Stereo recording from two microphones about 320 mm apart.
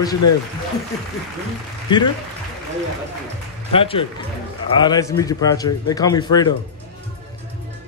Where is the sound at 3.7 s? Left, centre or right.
Centre.